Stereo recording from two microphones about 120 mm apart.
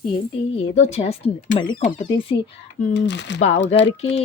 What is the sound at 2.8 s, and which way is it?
Speech, 90° left.